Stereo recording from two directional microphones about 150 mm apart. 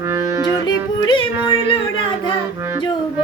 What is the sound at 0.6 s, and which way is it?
Music, 30° left (ahead or behind).